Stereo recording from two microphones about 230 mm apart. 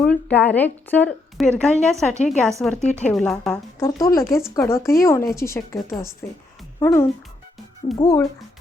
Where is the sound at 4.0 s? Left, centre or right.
Centre.